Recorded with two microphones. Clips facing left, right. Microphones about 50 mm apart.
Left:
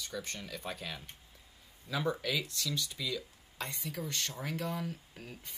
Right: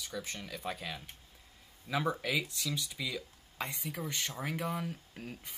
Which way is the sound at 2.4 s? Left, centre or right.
Centre.